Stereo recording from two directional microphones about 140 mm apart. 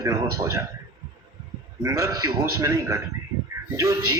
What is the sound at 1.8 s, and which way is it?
A man's voice, 25° right (ahead or behind).